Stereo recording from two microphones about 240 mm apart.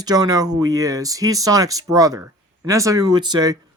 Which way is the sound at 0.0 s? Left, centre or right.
Centre.